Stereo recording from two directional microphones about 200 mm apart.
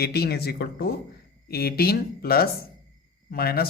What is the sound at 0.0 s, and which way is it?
Speech, 50° left (ahead or behind).